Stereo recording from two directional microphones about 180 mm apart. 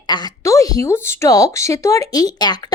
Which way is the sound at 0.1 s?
20° left (ahead or behind).